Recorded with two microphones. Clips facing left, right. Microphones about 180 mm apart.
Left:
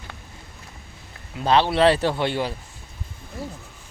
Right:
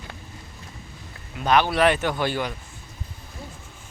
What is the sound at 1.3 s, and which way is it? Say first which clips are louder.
A man's voice: left 1 dB; 30° left (ahead or behind).